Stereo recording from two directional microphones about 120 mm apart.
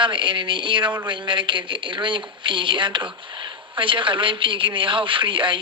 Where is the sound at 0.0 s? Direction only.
40° right (ahead or behind).